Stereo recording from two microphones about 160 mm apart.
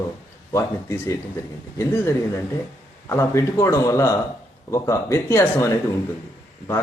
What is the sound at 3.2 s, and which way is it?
Speech, 15° left (ahead or behind).